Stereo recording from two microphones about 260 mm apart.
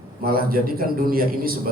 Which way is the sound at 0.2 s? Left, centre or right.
Right.